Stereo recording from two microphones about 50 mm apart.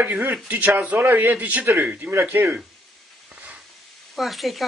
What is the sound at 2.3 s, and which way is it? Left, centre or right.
Speech, right.